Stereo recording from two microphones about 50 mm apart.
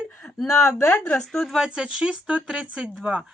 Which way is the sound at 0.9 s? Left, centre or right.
Left.